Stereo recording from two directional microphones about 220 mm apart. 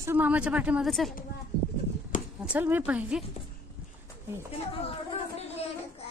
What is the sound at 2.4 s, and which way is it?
Speech, 5° right (ahead or behind).